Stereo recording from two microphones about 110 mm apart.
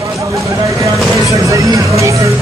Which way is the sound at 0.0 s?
30° right (ahead or behind).